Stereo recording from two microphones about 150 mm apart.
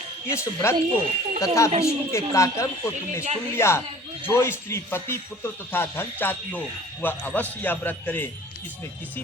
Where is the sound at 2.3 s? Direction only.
20° left (ahead or behind).